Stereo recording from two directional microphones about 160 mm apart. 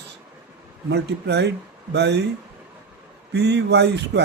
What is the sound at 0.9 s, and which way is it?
Speech, 90° right.